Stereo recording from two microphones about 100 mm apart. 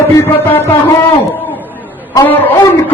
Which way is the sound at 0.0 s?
30° left (ahead or behind).